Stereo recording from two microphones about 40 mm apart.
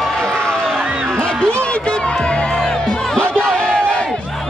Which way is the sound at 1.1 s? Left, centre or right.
Left.